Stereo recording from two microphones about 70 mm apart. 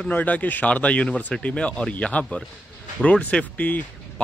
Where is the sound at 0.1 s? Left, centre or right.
Left.